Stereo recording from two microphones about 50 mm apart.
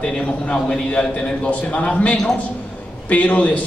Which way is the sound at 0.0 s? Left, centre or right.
Centre.